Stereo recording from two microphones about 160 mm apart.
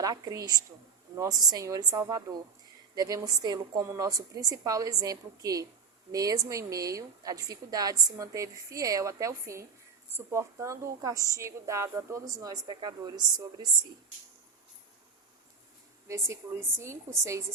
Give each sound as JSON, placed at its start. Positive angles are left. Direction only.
{"t": 0.0, "sound": "a woman's voice", "side_deg": -25}
{"t": 16.0, "sound": "a woman's voice", "side_deg": -20}